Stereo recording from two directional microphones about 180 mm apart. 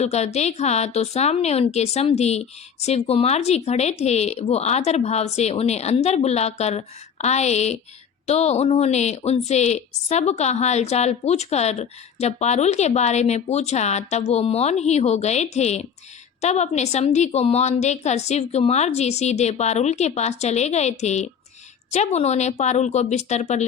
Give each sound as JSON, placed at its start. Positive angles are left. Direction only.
{"t": 0.0, "sound": "a woman's voice", "side_deg": 35}